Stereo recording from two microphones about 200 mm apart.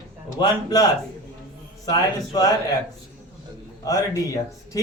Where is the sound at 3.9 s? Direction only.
15° left (ahead or behind).